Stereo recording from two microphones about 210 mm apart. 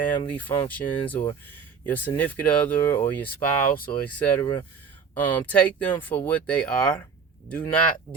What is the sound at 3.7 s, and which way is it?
Speech, 40° left (ahead or behind).